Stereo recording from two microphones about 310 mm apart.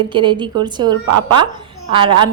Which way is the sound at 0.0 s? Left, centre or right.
Centre.